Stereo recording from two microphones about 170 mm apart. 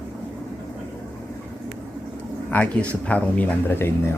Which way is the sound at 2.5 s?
10° left (ahead or behind).